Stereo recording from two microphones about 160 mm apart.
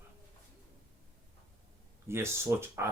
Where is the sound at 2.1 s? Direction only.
15° right (ahead or behind).